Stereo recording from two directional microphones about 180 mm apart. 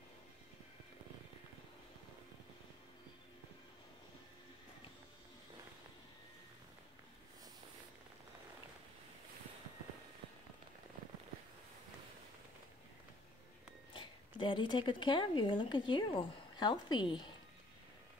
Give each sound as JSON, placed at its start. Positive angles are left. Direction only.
{"t": 13.9, "sound": "speech", "side_deg": 30}